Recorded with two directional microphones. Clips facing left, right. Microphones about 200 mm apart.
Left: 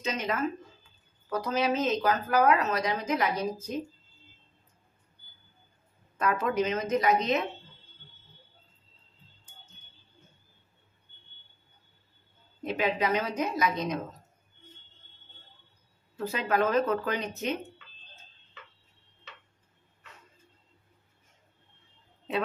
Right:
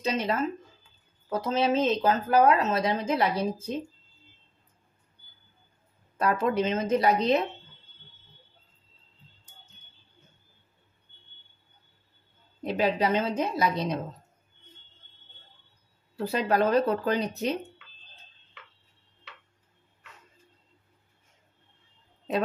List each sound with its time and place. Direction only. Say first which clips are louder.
0.0 s a woman's voice: right 3 dB; 30° right (ahead or behind)
6.1 s a woman's voice: right 2 dB; 30° right (ahead or behind)
12.6 s a woman's voice: right 3 dB; 35° right (ahead or behind)
16.2 s a woman's voice: right 3 dB; 35° right (ahead or behind)